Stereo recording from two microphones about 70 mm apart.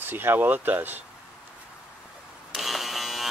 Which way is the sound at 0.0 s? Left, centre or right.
Right.